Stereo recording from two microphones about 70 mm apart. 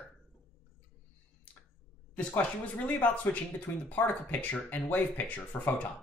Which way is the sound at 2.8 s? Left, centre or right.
Left.